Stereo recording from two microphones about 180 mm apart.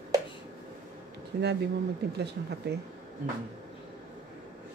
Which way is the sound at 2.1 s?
65° right (ahead or behind).